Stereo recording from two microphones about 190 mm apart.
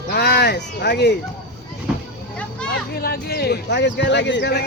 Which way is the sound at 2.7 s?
55° left (ahead or behind).